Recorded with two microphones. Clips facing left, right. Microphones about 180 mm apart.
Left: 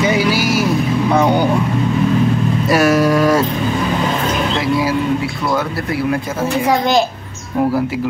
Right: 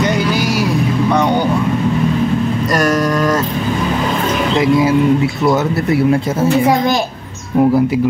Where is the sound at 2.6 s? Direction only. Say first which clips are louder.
Left 4 dB; 5° left (ahead or behind).